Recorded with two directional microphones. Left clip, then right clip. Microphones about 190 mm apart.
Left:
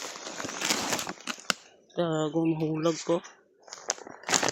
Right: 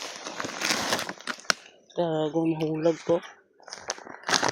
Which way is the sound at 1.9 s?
20° left (ahead or behind).